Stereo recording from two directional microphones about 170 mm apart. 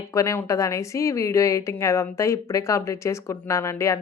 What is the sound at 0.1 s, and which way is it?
A woman's voice, 20° left (ahead or behind).